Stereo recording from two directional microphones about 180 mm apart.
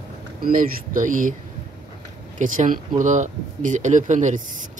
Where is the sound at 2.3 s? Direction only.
45° right (ahead or behind).